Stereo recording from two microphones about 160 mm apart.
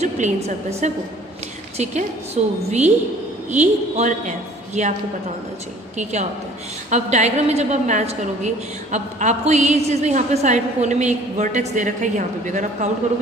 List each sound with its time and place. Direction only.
0.0 s a woman's voice: 45° right (ahead or behind)
6.0 s a woman's voice: 45° right (ahead or behind)